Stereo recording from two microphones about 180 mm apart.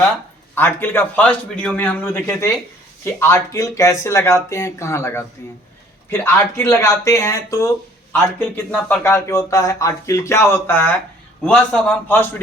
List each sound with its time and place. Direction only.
0.5 s a man's voice: 10° left (ahead or behind)